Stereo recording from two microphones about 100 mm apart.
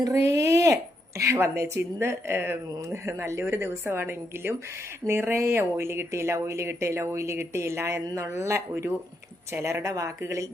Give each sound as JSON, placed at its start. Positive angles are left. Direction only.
{"t": 0.0, "sound": "speech", "side_deg": -30}